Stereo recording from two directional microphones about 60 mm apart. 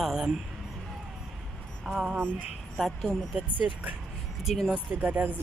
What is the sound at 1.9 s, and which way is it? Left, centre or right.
Speech, centre.